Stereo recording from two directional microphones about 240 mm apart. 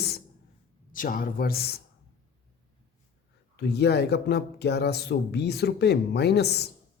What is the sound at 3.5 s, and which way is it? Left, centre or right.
A woman's voice, left.